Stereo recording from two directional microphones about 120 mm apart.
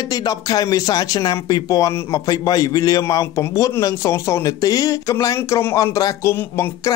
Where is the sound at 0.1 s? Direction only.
30° left (ahead or behind).